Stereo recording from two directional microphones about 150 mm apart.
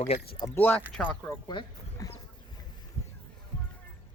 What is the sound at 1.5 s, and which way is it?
Speech, 30° left (ahead or behind).